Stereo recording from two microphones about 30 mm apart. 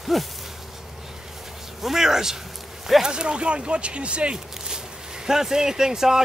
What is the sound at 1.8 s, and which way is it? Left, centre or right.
Speech, centre.